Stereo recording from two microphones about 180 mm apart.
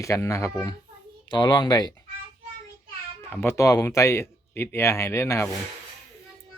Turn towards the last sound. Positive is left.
turn(degrees=15)  # may be behind; listen again after turning